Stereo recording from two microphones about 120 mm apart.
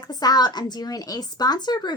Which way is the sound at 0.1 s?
35° left (ahead or behind).